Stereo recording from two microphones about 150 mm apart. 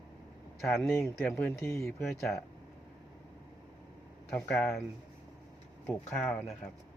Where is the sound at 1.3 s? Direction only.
15° left (ahead or behind).